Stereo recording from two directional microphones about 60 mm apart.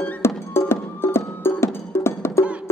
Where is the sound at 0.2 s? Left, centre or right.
Left.